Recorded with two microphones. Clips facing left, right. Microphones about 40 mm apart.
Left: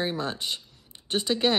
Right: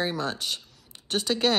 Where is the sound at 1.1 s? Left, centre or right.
Centre.